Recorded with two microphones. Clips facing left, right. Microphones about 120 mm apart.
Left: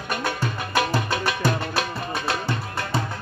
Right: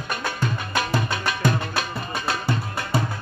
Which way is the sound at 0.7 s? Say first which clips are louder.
Left 3 dB; 5° left (ahead or behind).